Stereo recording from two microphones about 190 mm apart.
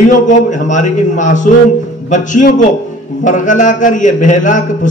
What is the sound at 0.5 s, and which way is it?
A man's voice, 40° left (ahead or behind).